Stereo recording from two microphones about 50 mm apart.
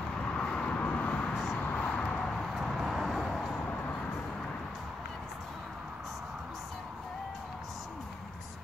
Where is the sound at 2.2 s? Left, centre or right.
Centre.